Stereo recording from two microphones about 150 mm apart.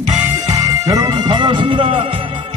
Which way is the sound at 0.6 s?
25° right (ahead or behind).